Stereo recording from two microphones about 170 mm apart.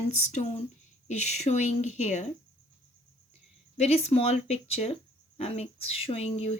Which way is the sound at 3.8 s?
40° left (ahead or behind).